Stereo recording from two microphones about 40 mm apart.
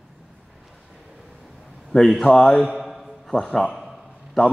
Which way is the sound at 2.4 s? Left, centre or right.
Centre.